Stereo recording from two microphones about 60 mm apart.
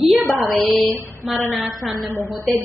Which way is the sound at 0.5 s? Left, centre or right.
Centre.